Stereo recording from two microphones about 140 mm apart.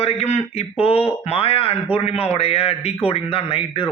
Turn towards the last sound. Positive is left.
turn(degrees=40)  # may be behind; listen again after turning